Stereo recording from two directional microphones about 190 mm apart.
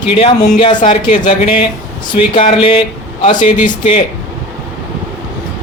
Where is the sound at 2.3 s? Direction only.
30° left (ahead or behind).